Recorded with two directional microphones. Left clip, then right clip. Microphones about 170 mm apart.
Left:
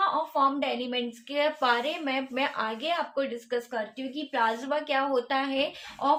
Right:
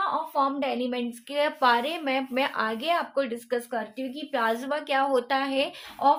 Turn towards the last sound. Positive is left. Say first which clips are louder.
# right 4 dB
turn(degrees=-35)  # may be behind; listen again after turning